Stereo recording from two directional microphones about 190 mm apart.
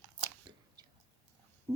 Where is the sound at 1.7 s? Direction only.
20° right (ahead or behind).